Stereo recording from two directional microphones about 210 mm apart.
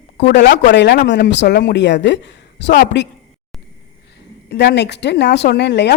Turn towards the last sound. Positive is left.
turn(degrees=55)  # may be behind; listen again after turning